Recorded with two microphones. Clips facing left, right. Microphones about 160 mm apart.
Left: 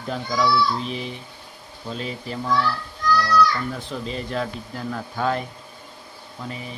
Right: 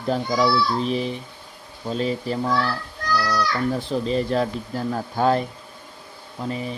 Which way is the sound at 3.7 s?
35° right (ahead or behind).